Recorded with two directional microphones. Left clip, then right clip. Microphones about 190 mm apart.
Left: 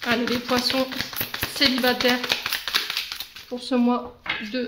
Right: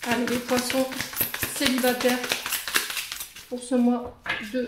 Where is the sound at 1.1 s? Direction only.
30° left (ahead or behind).